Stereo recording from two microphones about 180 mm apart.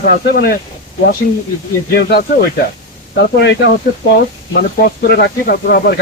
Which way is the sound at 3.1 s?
75° left (ahead or behind).